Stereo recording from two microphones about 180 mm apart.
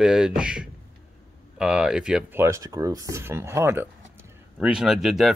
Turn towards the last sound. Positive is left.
turn(degrees=0)  # may be behind; listen again after turning